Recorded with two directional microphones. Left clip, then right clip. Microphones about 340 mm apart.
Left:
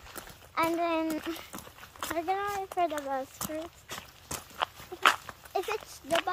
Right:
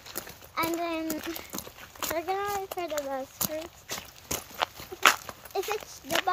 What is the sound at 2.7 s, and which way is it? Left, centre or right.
Speech, centre.